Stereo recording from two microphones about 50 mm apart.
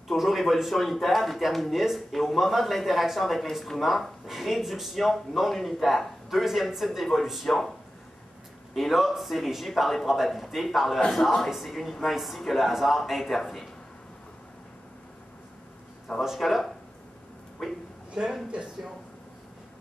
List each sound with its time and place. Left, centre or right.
0.1 s speech: centre
8.7 s speech: centre
16.2 s speech: centre
18.2 s speech: centre